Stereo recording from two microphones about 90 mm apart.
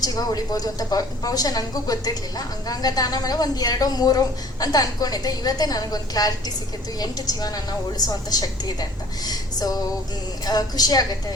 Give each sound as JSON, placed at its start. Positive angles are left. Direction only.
{"t": 0.0, "sound": "a woman's voice", "side_deg": 45}